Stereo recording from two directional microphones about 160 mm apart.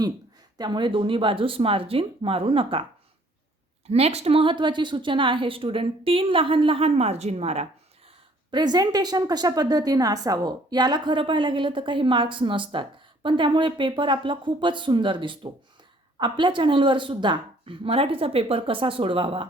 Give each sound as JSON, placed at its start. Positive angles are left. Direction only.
{"t": 0.6, "sound": "a woman's voice", "side_deg": -30}
{"t": 3.8, "sound": "a woman's voice", "side_deg": -40}
{"t": 8.4, "sound": "a woman's voice", "side_deg": -25}